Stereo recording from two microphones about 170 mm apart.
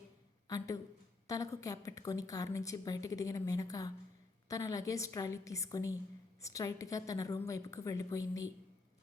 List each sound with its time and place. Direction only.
0.4 s a woman's voice: 20° left (ahead or behind)